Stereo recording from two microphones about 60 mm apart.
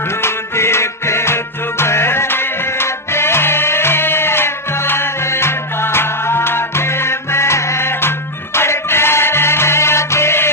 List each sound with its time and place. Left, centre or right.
0.2 s music: left